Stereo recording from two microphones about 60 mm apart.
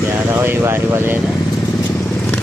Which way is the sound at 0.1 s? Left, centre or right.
Right.